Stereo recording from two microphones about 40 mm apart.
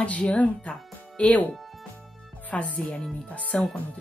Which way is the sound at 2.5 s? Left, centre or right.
Left.